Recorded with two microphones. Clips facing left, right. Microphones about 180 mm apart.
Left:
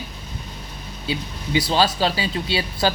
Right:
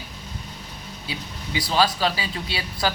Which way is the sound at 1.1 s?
25° left (ahead or behind).